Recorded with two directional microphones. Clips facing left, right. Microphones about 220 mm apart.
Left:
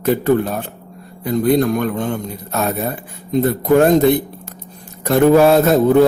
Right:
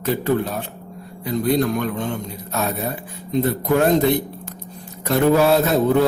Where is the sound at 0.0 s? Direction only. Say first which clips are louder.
Left 5 dB; 50° left (ahead or behind).